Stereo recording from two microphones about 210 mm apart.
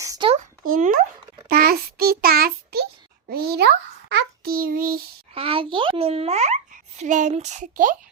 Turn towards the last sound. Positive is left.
turn(degrees=-40)  # may be behind; listen again after turning